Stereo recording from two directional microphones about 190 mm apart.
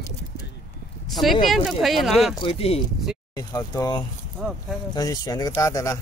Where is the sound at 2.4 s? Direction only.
30° left (ahead or behind).